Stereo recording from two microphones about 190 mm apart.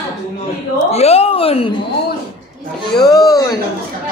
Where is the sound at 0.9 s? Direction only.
35° left (ahead or behind).